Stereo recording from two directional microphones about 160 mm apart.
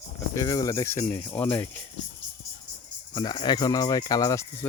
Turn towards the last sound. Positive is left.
turn(degrees=20)  # may be behind; listen again after turning